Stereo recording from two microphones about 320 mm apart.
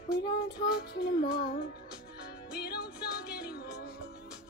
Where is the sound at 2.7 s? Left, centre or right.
Left.